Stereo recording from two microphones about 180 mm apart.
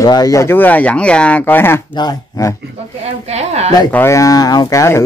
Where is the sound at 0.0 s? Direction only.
20° left (ahead or behind).